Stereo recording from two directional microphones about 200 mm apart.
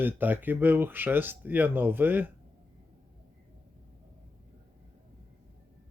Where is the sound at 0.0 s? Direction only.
10° right (ahead or behind).